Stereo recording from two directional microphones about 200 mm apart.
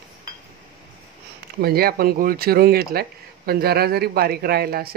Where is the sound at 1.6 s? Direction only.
50° right (ahead or behind).